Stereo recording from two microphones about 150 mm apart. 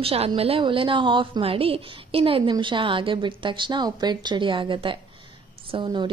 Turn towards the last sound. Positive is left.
turn(degrees=-30)  # may be behind; listen again after turning